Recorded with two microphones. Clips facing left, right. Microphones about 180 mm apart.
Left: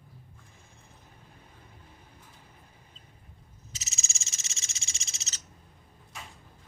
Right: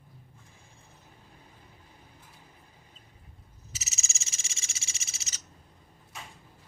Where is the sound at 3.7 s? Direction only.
5° right (ahead or behind).